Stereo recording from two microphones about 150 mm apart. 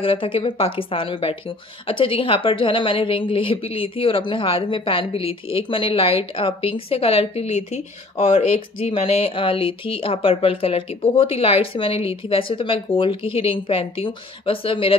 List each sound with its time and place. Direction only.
0.0 s a woman's voice: 35° left (ahead or behind)